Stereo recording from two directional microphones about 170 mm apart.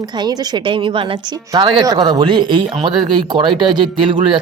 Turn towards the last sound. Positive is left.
turn(degrees=-30)  # may be behind; listen again after turning